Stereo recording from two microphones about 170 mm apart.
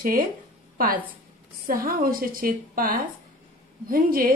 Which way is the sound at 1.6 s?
55° right (ahead or behind).